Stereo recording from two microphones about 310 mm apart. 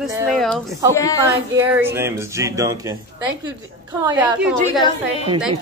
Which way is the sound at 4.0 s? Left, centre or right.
Centre.